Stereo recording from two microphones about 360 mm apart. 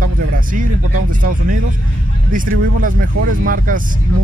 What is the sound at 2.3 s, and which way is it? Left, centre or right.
Speech, right.